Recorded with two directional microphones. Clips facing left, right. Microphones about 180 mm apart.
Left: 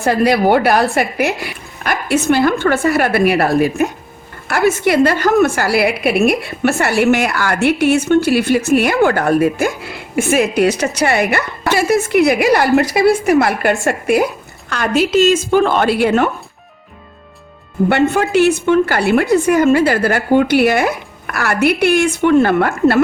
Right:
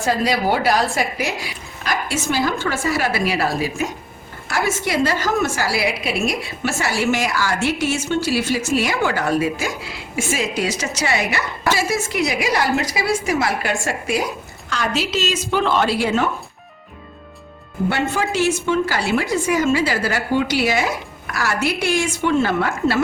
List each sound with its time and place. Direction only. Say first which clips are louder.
0.0 s a woman's voice: left 6 dB; 60° left (ahead or behind)
17.8 s a woman's voice: left 7 dB; 60° left (ahead or behind)